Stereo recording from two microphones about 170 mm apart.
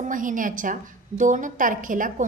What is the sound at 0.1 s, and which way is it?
A woman's voice, 50° right (ahead or behind).